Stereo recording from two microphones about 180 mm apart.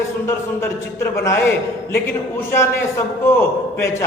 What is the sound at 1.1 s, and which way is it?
Speech, 15° left (ahead or behind).